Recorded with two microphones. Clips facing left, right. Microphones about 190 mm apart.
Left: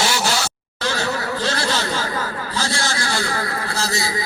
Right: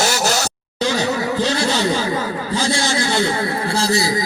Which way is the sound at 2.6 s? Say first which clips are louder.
Right 5 dB; 20° right (ahead or behind).